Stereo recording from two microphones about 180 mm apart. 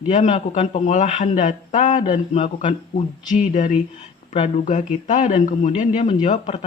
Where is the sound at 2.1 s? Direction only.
30° left (ahead or behind).